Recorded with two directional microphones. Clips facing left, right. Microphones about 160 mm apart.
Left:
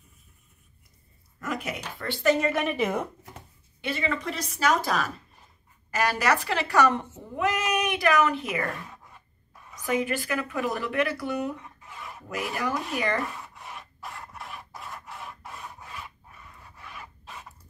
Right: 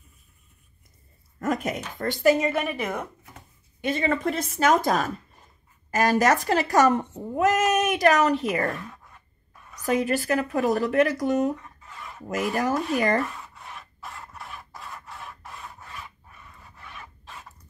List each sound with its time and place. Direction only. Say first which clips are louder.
1.4 s speech: right 6 dB; 45° right (ahead or behind)
2.1 s a woman's voice: right 2 dB; 5° right (ahead or behind)
3.8 s a woman's voice: right 5 dB; 45° right (ahead or behind)
8.9 s a sound: left 1 dB; 10° left (ahead or behind)
9.8 s speech: right 4 dB; 40° right (ahead or behind)
11.8 s filing: even; 10° left (ahead or behind)
12.5 s speech: right 5 dB; 40° right (ahead or behind)
13.2 s rub: right 3 dB; 5° left (ahead or behind)